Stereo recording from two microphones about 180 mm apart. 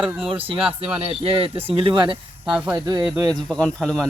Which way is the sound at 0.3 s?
30° right (ahead or behind).